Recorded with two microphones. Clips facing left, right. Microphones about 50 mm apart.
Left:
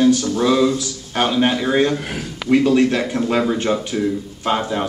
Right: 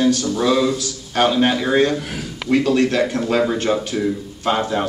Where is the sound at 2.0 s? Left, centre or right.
Left.